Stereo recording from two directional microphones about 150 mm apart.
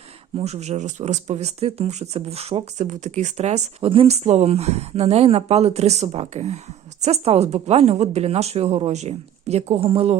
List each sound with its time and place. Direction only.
0.3 s speech: 45° right (ahead or behind)